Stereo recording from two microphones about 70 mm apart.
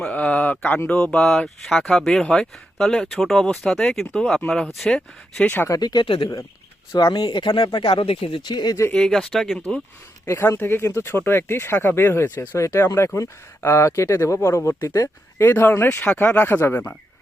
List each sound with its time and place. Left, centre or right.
0.0 s speech: centre
5.8 s speech: left
6.9 s speech: left
8.9 s speech: centre
9.3 s speech: centre
9.6 s speech: centre
10.2 s speech: left
15.4 s speech: left